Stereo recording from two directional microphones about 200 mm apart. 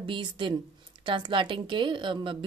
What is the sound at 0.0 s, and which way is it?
A woman's voice, 25° right (ahead or behind).